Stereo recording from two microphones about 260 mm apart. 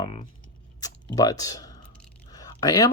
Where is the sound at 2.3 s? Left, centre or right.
Centre.